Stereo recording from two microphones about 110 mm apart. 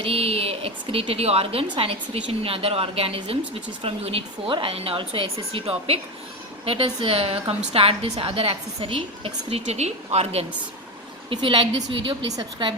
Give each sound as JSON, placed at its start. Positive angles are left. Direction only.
{"t": 0.0, "sound": "a woman's voice", "side_deg": -60}
{"t": 1.6, "sound": "a woman's voice", "side_deg": -55}
{"t": 11.3, "sound": "a woman's voice", "side_deg": -50}